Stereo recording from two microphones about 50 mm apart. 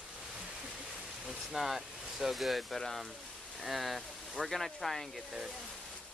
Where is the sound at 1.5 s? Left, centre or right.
Centre.